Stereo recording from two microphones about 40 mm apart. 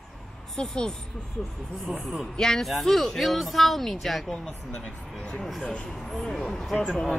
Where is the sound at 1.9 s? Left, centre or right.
Centre.